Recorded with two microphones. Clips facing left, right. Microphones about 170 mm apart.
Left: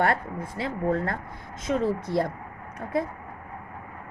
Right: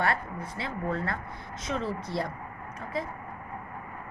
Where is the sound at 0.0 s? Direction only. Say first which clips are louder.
Left 4 dB; 50° left (ahead or behind).